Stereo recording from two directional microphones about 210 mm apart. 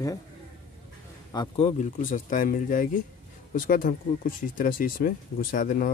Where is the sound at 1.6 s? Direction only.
35° left (ahead or behind).